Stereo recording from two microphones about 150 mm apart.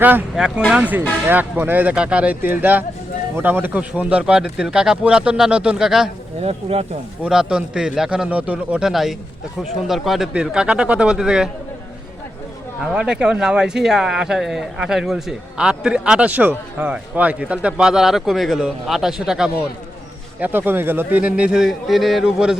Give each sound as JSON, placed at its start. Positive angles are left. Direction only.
{"t": 0.0, "sound": "speech", "side_deg": -10}
{"t": 6.4, "sound": "speech", "side_deg": -45}
{"t": 7.2, "sound": "speech", "side_deg": -5}
{"t": 12.8, "sound": "speech", "side_deg": -5}